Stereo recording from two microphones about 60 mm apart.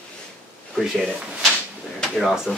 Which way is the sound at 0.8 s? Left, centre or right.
Centre.